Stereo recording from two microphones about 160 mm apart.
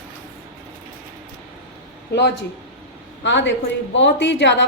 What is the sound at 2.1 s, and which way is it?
A man's voice, 90° left.